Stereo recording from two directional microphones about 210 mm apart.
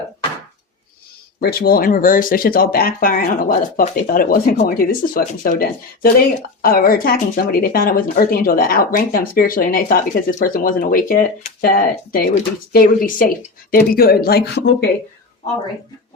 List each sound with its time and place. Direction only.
1.4 s speech: 45° left (ahead or behind)